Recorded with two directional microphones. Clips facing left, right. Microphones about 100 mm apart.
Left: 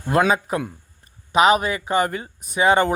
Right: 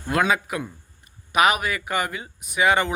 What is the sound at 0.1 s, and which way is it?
Speech, 30° left (ahead or behind).